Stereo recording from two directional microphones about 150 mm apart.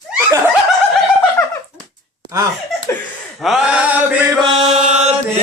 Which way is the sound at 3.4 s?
Centre (ahead or behind).